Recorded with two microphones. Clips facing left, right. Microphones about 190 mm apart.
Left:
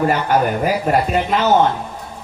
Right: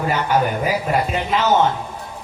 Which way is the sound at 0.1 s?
50° left (ahead or behind).